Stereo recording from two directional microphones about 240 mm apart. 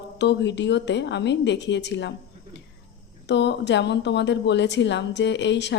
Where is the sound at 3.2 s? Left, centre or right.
Left.